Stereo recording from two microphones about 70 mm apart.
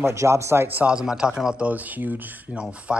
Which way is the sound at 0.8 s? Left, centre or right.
Centre.